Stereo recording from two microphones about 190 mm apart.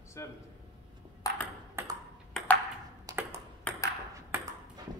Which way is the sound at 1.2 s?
20° left (ahead or behind).